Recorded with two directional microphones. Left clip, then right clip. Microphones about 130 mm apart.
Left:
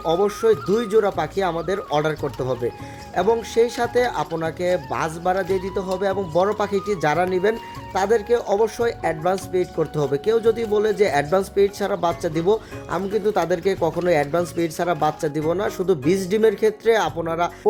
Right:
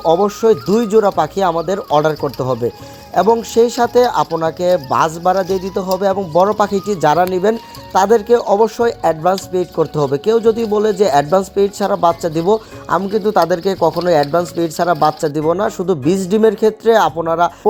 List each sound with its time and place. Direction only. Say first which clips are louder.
0.3 s speech: right 5 dB; 35° right (ahead or behind)